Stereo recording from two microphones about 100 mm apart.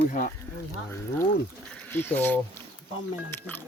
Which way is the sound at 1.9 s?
20° left (ahead or behind).